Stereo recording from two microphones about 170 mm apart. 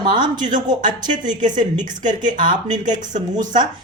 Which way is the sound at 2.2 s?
25° right (ahead or behind).